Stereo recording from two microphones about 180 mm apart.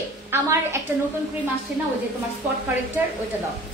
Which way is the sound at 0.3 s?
15° right (ahead or behind).